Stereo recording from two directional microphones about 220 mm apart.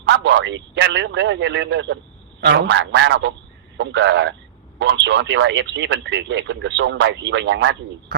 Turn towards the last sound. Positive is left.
turn(degrees=-55)  # may be behind; listen again after turning